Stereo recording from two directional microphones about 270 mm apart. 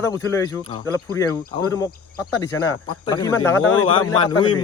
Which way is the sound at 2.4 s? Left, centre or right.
Centre.